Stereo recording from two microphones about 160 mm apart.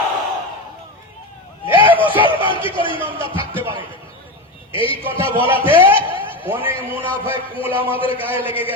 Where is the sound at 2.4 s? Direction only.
30° left (ahead or behind).